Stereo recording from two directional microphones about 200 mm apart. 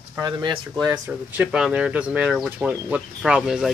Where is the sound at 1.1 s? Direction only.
5° right (ahead or behind).